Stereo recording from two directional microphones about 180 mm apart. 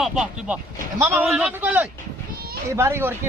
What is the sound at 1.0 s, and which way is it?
Speech, 15° right (ahead or behind).